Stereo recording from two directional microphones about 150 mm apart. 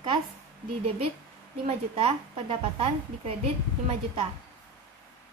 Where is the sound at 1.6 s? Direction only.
40° right (ahead or behind).